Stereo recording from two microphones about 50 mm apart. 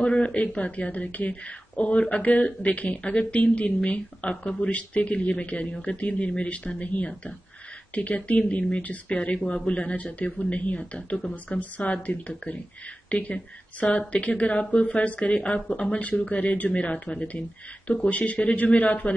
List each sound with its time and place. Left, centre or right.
0.0 s a woman's voice: left